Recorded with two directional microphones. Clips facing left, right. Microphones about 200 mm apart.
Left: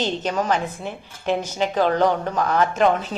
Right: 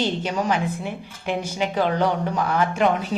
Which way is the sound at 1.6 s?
40° left (ahead or behind).